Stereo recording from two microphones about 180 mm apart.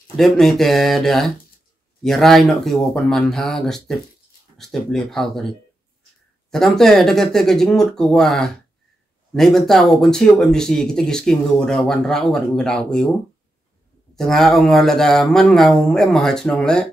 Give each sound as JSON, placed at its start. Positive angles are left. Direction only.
{"t": 0.2, "sound": "speech", "side_deg": 0}
{"t": 6.5, "sound": "speech", "side_deg": 0}
{"t": 14.1, "sound": "speech", "side_deg": 0}